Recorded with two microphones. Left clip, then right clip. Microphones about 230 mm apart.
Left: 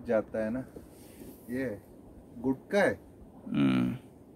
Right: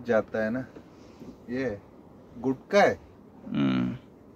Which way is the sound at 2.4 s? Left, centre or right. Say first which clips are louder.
Right 5 dB; right.